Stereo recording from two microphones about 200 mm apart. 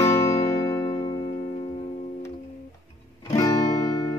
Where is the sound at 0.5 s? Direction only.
15° left (ahead or behind).